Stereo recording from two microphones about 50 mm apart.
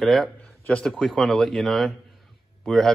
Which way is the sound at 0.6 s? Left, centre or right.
Left.